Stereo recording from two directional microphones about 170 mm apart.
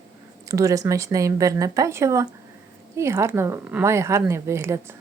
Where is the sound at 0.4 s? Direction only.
20° right (ahead or behind).